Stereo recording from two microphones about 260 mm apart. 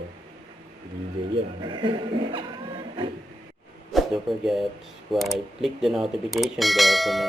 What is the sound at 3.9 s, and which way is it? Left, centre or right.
Speech, centre.